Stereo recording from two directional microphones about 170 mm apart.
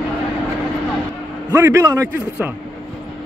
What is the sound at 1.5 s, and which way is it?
Speech, 15° right (ahead or behind).